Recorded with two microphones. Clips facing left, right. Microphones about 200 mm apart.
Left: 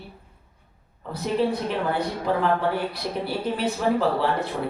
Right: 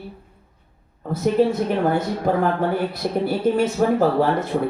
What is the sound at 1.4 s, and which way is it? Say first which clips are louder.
Speech: right 6 dB; 50° right (ahead or behind).